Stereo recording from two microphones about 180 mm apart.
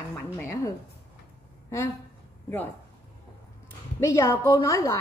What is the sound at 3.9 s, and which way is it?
A woman's voice, 15° left (ahead or behind).